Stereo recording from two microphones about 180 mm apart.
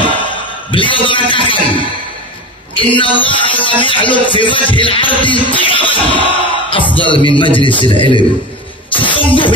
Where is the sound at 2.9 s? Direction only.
30° left (ahead or behind).